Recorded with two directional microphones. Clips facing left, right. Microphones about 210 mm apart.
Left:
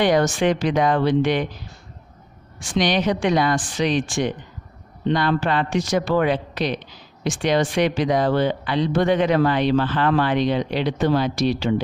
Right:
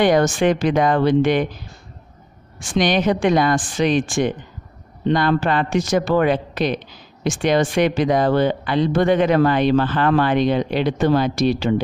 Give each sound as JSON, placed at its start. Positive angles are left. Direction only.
{"t": 0.0, "sound": "speech", "side_deg": -50}
{"t": 2.7, "sound": "speech", "side_deg": -50}